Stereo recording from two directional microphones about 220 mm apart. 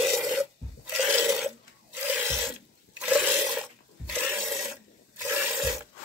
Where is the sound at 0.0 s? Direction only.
Centre (ahead or behind).